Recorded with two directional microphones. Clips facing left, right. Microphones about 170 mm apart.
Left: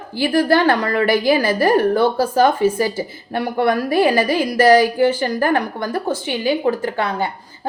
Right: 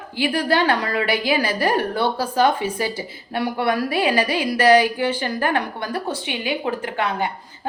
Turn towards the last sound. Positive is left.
turn(degrees=35)  # may be behind; listen again after turning